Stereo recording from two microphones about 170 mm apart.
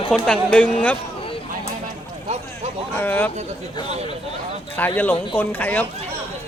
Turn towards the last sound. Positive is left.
turn(degrees=10)  # may be behind; listen again after turning